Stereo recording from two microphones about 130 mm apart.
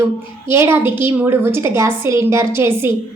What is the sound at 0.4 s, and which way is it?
A woman's voice, 20° right (ahead or behind).